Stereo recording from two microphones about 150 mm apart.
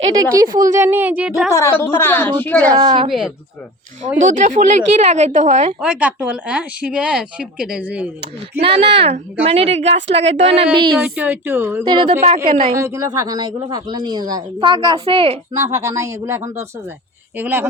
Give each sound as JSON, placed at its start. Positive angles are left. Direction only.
{"t": 0.6, "sound": "speech", "side_deg": -20}
{"t": 1.5, "sound": "a woman's voice", "side_deg": 20}
{"t": 2.7, "sound": "a woman's voice", "side_deg": -35}
{"t": 3.1, "sound": "speech", "side_deg": 0}
{"t": 4.3, "sound": "a woman's voice", "side_deg": -60}
{"t": 5.8, "sound": "speech", "side_deg": -10}
{"t": 8.6, "sound": "a woman's voice", "side_deg": -40}
{"t": 11.0, "sound": "speech", "side_deg": -10}
{"t": 11.9, "sound": "a woman's voice", "side_deg": -35}
{"t": 12.7, "sound": "a woman's voice", "side_deg": -20}
{"t": 15.5, "sound": "a woman's voice", "side_deg": -20}